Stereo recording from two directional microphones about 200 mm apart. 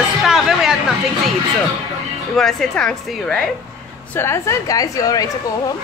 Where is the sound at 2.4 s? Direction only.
Centre (ahead or behind).